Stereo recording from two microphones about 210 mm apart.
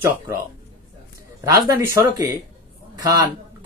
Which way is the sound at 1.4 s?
15° right (ahead or behind).